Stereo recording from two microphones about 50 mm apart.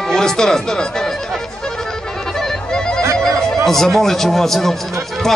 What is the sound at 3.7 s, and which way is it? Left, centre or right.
Speech, centre.